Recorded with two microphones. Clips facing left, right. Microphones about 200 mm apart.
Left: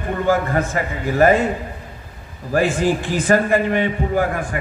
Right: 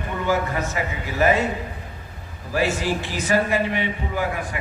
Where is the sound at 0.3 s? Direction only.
50° left (ahead or behind).